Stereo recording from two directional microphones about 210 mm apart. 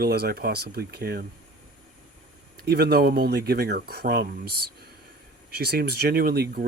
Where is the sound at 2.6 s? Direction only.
50° right (ahead or behind).